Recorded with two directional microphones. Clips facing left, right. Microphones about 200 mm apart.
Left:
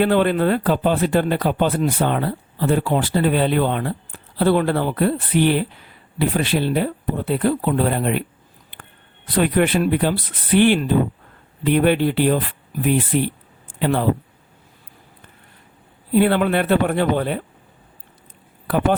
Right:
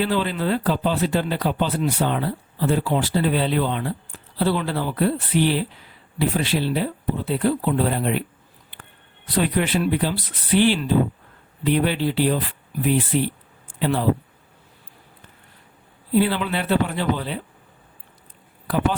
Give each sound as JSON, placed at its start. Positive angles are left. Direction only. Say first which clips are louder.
{"t": 0.0, "sound": "speech", "louder": "left 6 dB", "side_deg": 55}
{"t": 16.1, "sound": "speech", "louder": "left 4 dB", "side_deg": 55}